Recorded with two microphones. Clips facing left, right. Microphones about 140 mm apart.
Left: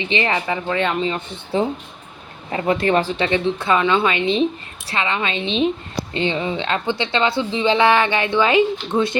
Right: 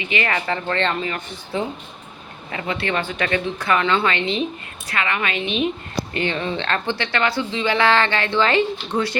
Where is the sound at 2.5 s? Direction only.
35° left (ahead or behind).